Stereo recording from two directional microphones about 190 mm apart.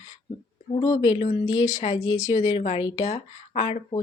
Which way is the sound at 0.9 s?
30° left (ahead or behind).